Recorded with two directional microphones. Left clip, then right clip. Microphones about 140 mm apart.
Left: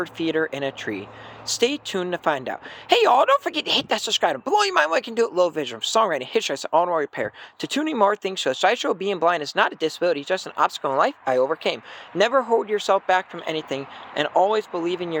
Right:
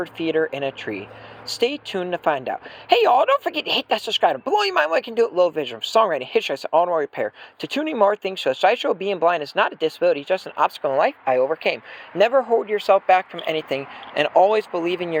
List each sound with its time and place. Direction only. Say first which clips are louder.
0.0 s speech: right 2 dB; 20° left (ahead or behind); by 15.2 s centre (ahead or behind)